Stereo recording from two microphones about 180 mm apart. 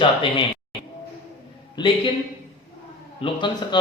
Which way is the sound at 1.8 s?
25° left (ahead or behind).